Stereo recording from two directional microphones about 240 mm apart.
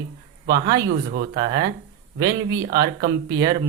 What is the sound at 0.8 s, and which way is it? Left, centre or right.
Speech, right.